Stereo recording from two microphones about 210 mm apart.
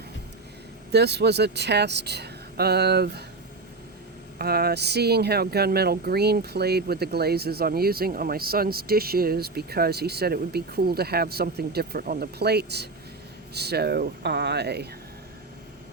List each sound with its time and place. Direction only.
0.9 s speech: 50° right (ahead or behind)
4.4 s speech: 45° right (ahead or behind)